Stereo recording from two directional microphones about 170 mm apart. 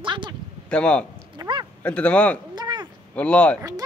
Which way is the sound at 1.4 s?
25° right (ahead or behind).